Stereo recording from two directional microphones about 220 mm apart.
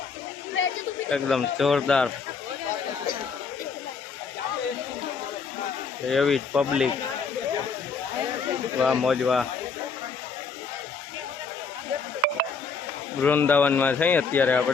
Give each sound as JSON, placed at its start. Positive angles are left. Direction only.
{"t": 0.6, "sound": "a sound", "side_deg": 65}
{"t": 1.1, "sound": "speech", "side_deg": 0}
{"t": 6.1, "sound": "speech", "side_deg": 0}
{"t": 8.8, "sound": "speech", "side_deg": 0}
{"t": 13.2, "sound": "speech", "side_deg": 10}